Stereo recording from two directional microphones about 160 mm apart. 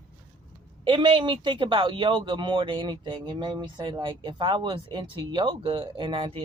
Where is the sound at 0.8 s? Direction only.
30° right (ahead or behind).